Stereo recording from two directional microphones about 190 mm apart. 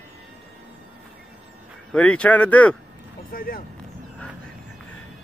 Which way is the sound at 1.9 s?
5° left (ahead or behind).